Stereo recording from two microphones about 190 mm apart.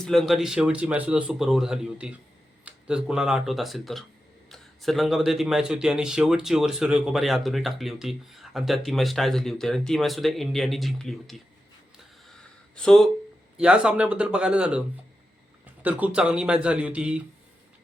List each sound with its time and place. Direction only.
0.0 s speech: centre (ahead or behind)
12.2 s a sound: 5° left (ahead or behind)
13.6 s a man's voice: 5° right (ahead or behind)